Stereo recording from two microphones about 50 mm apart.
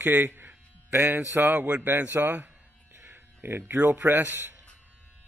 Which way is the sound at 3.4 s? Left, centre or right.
Right.